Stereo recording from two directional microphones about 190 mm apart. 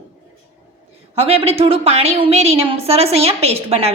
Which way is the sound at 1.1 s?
30° right (ahead or behind).